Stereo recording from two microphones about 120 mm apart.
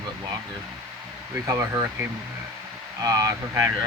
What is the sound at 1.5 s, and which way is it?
Speech, 20° right (ahead or behind).